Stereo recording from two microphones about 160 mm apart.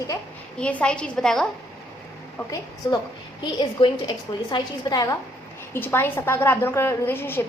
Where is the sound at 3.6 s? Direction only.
30° left (ahead or behind); by 7.4 s 15° left (ahead or behind).